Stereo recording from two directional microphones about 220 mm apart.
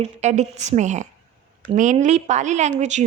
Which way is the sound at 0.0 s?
30° right (ahead or behind).